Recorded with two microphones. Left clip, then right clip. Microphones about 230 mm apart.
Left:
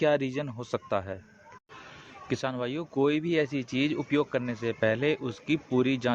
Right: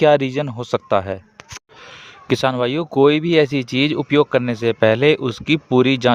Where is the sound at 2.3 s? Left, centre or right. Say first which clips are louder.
Right 14 dB; right.